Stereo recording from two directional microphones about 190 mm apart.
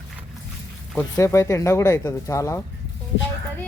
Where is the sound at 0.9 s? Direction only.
15° left (ahead or behind).